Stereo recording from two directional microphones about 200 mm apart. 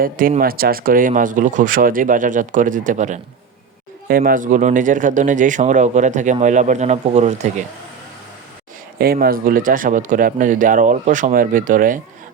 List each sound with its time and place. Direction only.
0.0 s speech: 45° right (ahead or behind)
9.0 s speech: 50° right (ahead or behind)